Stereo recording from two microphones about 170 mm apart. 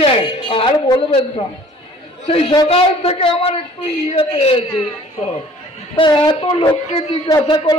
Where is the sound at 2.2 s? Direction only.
35° left (ahead or behind).